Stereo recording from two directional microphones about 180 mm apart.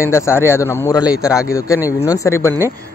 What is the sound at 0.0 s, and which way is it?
Speech, 15° left (ahead or behind).